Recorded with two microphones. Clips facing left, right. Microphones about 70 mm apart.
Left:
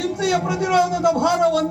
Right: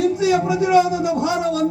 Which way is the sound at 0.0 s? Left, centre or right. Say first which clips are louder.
Right 3 dB; left.